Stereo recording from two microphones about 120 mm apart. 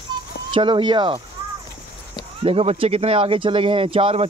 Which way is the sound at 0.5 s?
40° right (ahead or behind).